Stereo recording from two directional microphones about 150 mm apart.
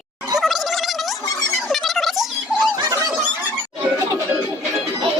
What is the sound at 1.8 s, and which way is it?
Music, centre (ahead or behind).